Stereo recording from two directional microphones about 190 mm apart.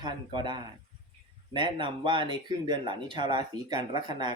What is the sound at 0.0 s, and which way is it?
Speech, 25° right (ahead or behind).